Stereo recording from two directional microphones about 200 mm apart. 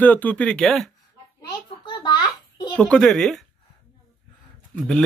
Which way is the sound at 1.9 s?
20° left (ahead or behind).